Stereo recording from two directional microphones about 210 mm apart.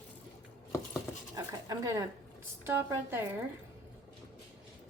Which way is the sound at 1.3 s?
15° right (ahead or behind).